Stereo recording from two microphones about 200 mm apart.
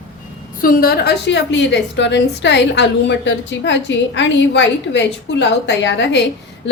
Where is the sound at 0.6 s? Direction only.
45° left (ahead or behind).